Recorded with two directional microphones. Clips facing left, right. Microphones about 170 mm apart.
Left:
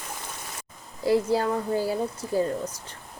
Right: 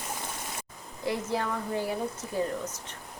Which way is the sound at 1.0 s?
30° left (ahead or behind).